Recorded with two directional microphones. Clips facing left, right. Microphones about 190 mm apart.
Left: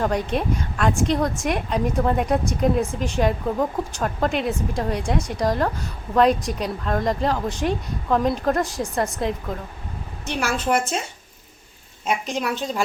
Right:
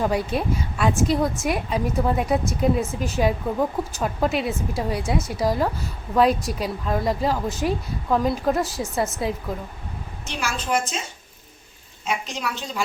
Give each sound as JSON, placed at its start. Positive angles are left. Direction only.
{"t": 0.0, "sound": "a woman's voice", "side_deg": -5}
{"t": 10.2, "sound": "a woman's voice", "side_deg": 60}
{"t": 12.0, "sound": "a woman's voice", "side_deg": 55}